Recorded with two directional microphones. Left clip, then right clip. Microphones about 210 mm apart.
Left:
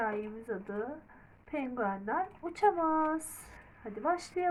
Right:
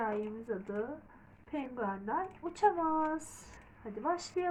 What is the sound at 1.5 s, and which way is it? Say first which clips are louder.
Speech: left 3 dB; 25° left (ahead or behind).